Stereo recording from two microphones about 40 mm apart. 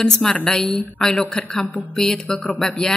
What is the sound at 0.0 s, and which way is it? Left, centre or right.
A woman's voice, centre.